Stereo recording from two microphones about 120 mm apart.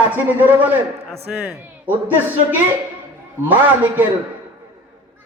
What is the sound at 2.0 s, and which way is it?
A man's voice, 15° right (ahead or behind).